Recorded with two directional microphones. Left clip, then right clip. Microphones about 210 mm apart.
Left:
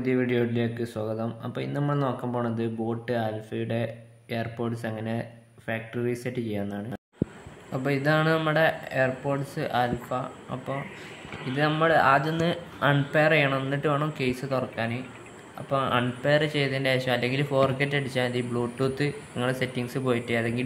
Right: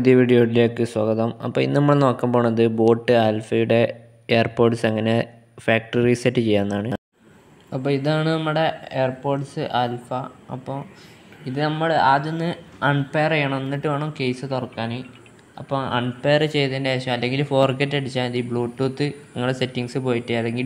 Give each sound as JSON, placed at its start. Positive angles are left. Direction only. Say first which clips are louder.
{"t": 0.0, "sound": "speech", "louder": "right 10 dB", "side_deg": -35}
{"t": 7.7, "sound": "speech", "louder": "right 3 dB", "side_deg": -10}